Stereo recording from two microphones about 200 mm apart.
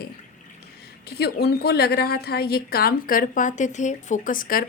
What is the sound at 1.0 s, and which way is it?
A woman's voice, 55° left (ahead or behind).